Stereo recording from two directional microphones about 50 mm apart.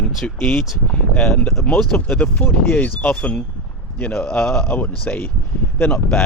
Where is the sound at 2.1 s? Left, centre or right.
Left.